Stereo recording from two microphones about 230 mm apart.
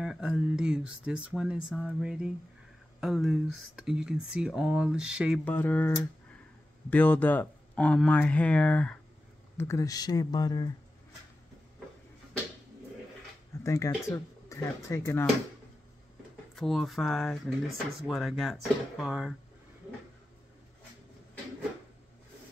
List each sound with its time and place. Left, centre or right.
0.0 s speech: centre
5.4 s speech: centre
13.7 s speech: centre
16.5 s speech: centre